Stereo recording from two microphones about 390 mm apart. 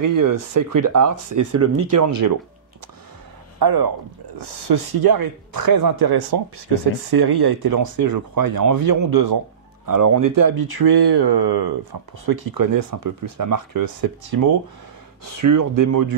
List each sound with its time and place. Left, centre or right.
0.0 s speech: right
1.5 s speech: right
1.9 s speech: right
3.5 s speech: right
4.4 s speech: right
9.8 s speech: right
15.2 s speech: right